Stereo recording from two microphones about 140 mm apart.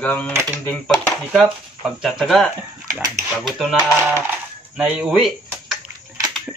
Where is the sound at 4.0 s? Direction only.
15° right (ahead or behind).